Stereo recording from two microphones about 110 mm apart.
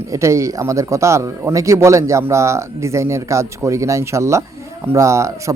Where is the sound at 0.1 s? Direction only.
25° right (ahead or behind).